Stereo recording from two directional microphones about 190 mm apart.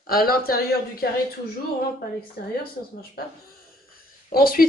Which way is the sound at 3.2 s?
55° left (ahead or behind).